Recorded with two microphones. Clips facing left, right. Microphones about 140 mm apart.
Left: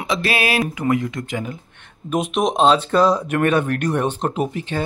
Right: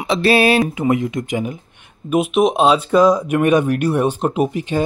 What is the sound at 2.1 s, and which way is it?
Speech, 5° right (ahead or behind).